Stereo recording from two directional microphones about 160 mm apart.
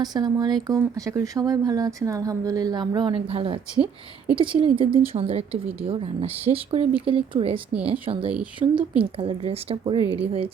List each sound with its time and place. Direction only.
0.0 s speech: 25° right (ahead or behind)
6.4 s speech: 35° right (ahead or behind)